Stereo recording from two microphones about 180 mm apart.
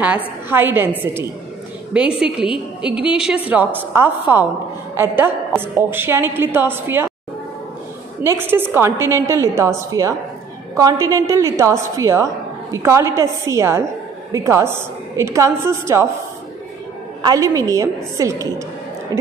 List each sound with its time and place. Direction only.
0.5 s a woman's voice: 10° right (ahead or behind)
8.2 s a woman's voice: 15° right (ahead or behind)
17.2 s a woman's voice: 20° right (ahead or behind)